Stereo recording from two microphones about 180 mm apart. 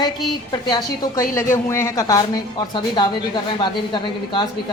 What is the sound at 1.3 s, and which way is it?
Speech, 15° left (ahead or behind).